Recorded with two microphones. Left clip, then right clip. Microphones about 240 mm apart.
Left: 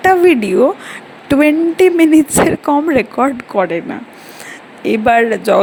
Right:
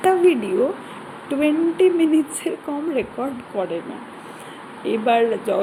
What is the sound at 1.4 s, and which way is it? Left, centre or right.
Speech, left.